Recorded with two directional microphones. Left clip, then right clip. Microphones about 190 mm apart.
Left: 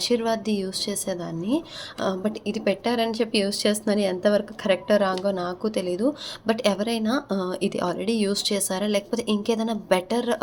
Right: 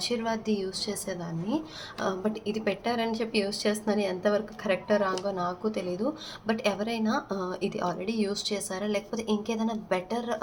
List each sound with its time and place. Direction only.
0.0 s a woman's voice: 40° left (ahead or behind)